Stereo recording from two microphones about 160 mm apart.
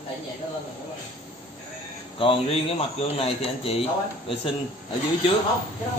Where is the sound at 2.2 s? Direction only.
35° left (ahead or behind).